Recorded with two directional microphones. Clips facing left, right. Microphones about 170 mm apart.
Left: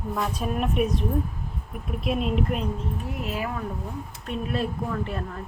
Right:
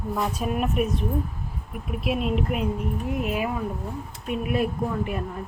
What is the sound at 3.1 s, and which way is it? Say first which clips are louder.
Speech: right 5 dB; 20° right (ahead or behind).